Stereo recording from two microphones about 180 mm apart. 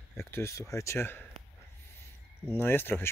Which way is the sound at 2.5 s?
10° left (ahead or behind).